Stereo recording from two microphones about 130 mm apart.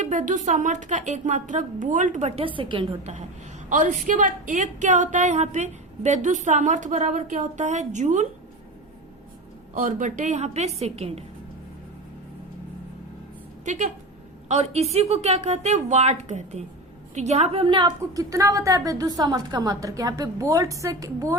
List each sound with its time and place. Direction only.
0.0 s a woman's voice: 70° right (ahead or behind)
2.4 s a woman's voice: 40° right (ahead or behind)
3.0 s a woman's voice: 60° right (ahead or behind)
3.7 s a woman's voice: 75° right (ahead or behind)
9.7 s a woman's voice: 85° right; by 11.2 s 50° right (ahead or behind)
13.7 s a woman's voice: 70° right (ahead or behind)
14.4 s a woman's voice: 55° right (ahead or behind); by 21.3 s 25° right (ahead or behind)